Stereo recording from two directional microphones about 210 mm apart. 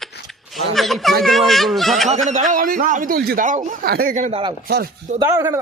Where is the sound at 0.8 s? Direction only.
Centre (ahead or behind).